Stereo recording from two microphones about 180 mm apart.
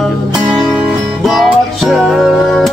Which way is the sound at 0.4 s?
15° right (ahead or behind).